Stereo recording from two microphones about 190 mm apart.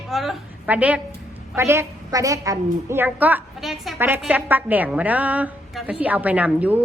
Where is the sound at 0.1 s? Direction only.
Centre (ahead or behind).